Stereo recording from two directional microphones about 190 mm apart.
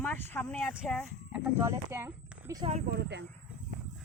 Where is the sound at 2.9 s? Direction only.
65° right (ahead or behind).